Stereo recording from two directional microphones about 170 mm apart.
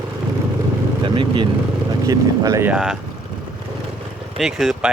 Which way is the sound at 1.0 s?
30° right (ahead or behind).